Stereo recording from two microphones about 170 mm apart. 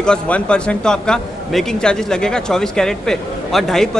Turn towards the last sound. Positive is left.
turn(degrees=0)  # may be behind; listen again after turning